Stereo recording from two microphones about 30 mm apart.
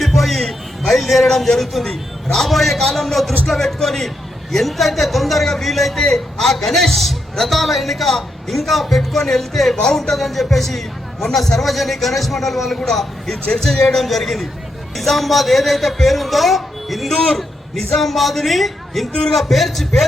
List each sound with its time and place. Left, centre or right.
0.0 s music: centre
0.9 s a man's voice: centre
1.3 s a man's voice: centre